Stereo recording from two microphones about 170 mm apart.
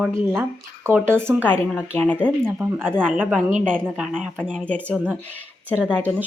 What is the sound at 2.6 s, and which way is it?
Speech, 10° right (ahead or behind).